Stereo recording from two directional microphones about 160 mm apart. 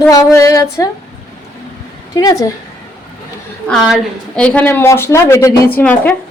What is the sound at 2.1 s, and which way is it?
Speech, 25° left (ahead or behind).